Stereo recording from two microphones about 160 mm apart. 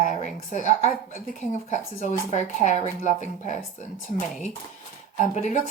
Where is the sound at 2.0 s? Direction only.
50° left (ahead or behind).